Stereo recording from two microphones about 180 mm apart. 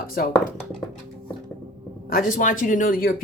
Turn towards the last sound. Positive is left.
turn(degrees=50)  # may be behind; listen again after turning